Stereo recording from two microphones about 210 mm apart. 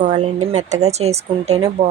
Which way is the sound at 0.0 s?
35° right (ahead or behind).